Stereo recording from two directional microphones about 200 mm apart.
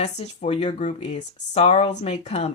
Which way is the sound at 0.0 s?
35° left (ahead or behind).